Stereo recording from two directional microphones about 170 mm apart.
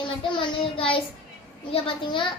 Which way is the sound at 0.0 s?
30° left (ahead or behind).